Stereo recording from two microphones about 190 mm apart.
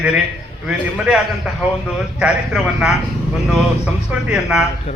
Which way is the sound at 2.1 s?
5° right (ahead or behind).